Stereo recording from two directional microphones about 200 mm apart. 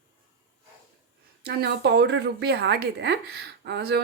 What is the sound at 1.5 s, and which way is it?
A woman's voice, 55° right (ahead or behind).